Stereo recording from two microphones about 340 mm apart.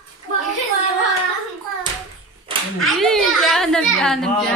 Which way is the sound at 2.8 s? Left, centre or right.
Centre.